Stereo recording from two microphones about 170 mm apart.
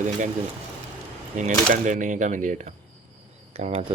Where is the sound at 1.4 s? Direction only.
50° right (ahead or behind).